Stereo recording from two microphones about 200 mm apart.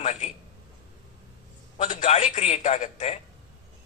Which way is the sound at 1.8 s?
35° left (ahead or behind).